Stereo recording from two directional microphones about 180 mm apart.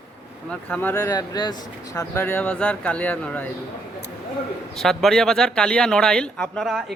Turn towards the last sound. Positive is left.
turn(degrees=0)  # may be behind; listen again after turning